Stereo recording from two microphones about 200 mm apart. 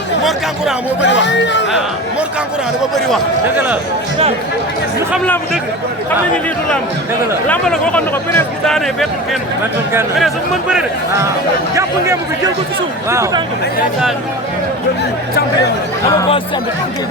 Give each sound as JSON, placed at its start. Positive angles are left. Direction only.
{"t": 1.0, "sound": "speech", "side_deg": 65}
{"t": 7.4, "sound": "speech", "side_deg": 5}
{"t": 11.7, "sound": "speech", "side_deg": -15}